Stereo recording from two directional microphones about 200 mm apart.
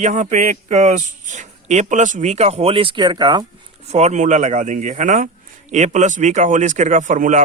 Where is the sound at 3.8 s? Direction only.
35° right (ahead or behind).